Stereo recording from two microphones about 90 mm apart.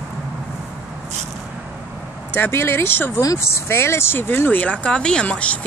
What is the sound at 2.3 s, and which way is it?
Speech, 25° left (ahead or behind).